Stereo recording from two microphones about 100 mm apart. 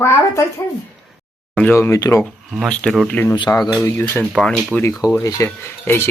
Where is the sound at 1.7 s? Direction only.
25° left (ahead or behind).